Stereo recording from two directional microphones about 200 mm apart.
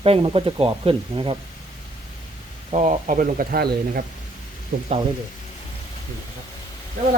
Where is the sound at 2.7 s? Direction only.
35° right (ahead or behind).